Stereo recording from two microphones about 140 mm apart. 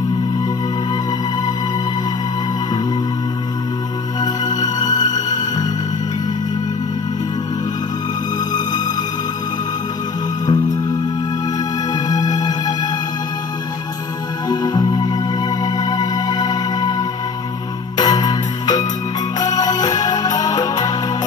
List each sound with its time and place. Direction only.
4.2 s music: 30° left (ahead or behind)
8.5 s music: 30° left (ahead or behind)
10.4 s music: 30° left (ahead or behind)
14.5 s music: 30° left (ahead or behind)